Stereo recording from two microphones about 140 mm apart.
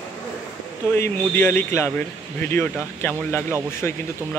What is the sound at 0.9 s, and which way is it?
A man's voice, 15° left (ahead or behind).